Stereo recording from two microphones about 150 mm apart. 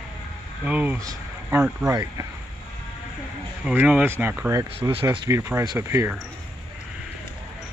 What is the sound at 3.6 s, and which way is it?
Speech, 10° right (ahead or behind).